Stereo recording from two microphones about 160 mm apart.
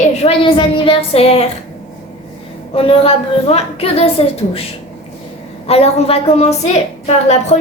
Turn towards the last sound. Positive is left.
turn(degrees=45)  # may be behind; listen again after turning